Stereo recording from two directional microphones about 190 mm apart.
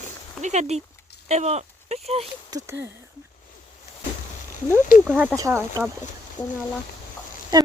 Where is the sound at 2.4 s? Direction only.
20° right (ahead or behind).